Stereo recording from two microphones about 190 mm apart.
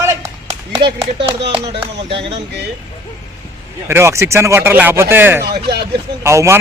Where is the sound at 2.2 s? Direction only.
65° right (ahead or behind).